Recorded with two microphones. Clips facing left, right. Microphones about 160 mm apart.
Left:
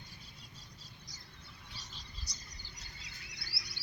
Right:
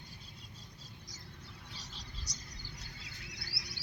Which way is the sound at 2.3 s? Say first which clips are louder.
Right 5 dB; 90° right.